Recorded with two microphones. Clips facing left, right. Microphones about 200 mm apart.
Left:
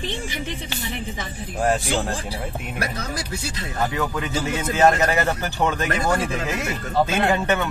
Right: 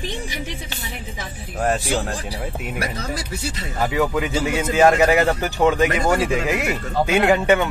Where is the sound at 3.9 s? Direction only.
15° right (ahead or behind).